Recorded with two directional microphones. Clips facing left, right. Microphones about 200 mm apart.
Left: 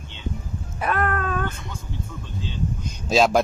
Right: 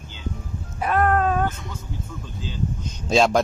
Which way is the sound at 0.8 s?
70° left (ahead or behind).